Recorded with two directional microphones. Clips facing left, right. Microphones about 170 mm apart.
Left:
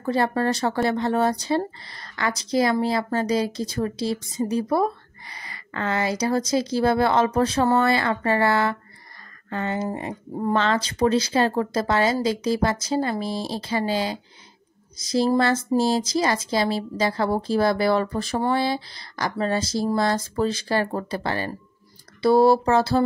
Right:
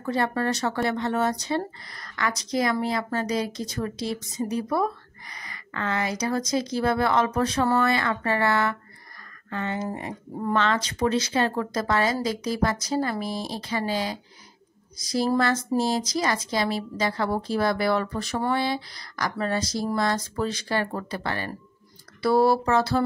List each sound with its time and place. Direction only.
0.0 s speech: 35° left (ahead or behind)